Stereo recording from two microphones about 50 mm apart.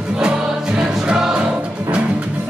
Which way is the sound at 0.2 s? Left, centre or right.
Centre.